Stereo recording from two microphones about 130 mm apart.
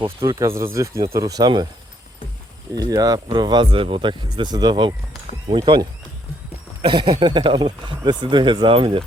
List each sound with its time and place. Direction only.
0.2 s speech: 20° right (ahead or behind)
2.7 s speech: 30° right (ahead or behind)